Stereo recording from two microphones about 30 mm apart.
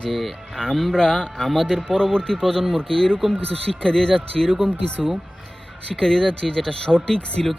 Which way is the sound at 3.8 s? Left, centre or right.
Left.